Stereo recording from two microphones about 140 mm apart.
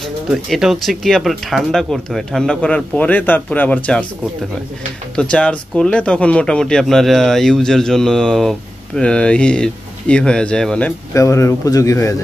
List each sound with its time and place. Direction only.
0.3 s speech: centre (ahead or behind)
5.1 s speech: 10° left (ahead or behind)
11.1 s speech: 20° left (ahead or behind)